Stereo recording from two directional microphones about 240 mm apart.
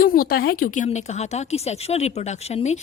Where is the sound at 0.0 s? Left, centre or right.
Left.